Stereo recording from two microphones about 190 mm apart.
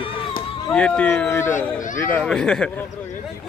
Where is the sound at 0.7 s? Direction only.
5° left (ahead or behind).